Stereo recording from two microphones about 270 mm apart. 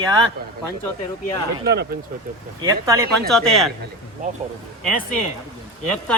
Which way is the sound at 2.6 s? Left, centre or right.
Centre.